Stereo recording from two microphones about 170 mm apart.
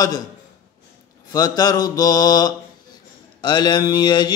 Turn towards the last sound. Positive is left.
turn(degrees=25)  # may be behind; listen again after turning